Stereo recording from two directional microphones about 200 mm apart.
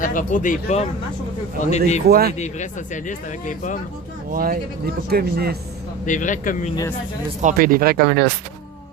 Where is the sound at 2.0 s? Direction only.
50° right (ahead or behind).